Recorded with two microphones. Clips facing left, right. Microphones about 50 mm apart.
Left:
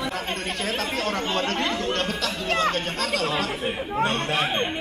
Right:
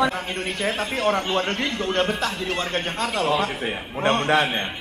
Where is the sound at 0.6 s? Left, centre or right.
Right.